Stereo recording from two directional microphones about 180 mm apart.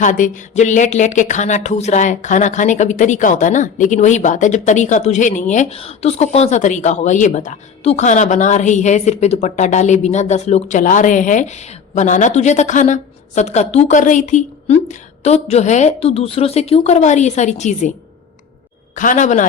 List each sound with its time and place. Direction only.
0.0 s speech: 45° left (ahead or behind)
18.9 s speech: 45° left (ahead or behind)